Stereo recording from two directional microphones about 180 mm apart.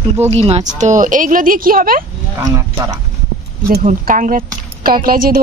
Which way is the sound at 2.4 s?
20° right (ahead or behind).